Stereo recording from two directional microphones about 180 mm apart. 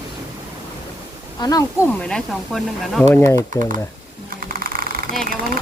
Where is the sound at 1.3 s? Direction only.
20° left (ahead or behind).